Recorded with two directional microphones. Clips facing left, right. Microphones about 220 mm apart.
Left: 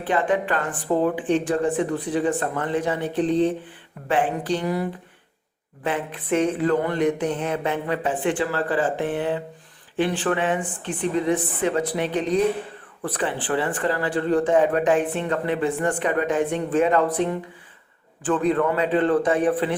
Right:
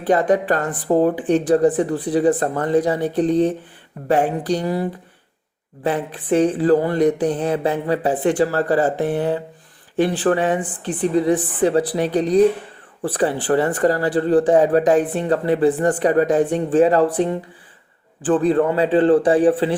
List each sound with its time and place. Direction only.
0.1 s speech: 40° right (ahead or behind)